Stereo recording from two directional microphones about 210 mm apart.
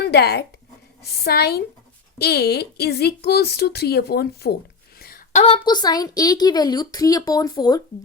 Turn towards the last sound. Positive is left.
turn(degrees=20)  # may be behind; listen again after turning